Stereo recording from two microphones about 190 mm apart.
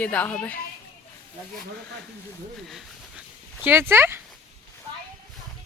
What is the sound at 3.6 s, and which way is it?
Speech, 10° right (ahead or behind).